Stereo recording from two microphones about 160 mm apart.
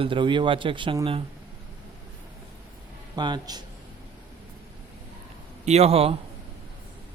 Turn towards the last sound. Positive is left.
turn(degrees=-40)  # may be behind; listen again after turning